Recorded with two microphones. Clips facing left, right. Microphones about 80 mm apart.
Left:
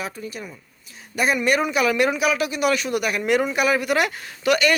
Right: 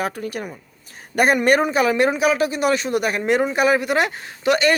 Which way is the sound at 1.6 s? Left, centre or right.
Right.